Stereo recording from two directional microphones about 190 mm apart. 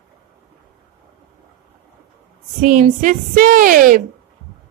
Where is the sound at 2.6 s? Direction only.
40° right (ahead or behind).